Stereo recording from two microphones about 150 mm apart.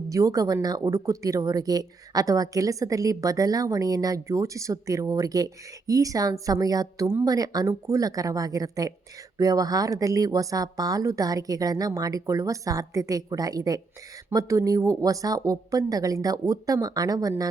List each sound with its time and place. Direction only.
0.1 s speech: 25° right (ahead or behind)